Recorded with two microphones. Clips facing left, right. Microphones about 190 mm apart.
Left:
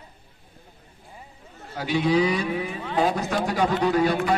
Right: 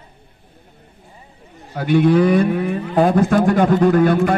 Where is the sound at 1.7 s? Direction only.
55° right (ahead or behind).